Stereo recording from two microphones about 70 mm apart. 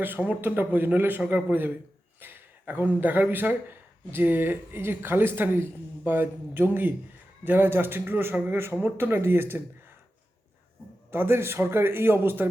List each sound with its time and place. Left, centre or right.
0.0 s a man's voice: right
11.1 s speech: right